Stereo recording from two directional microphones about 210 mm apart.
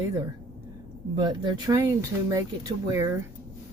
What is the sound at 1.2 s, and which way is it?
Speech, 20° right (ahead or behind).